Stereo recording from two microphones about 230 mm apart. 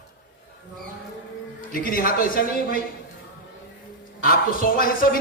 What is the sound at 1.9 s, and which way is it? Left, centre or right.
Speech, left.